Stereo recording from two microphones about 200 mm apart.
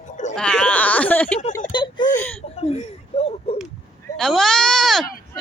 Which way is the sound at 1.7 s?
25° left (ahead or behind).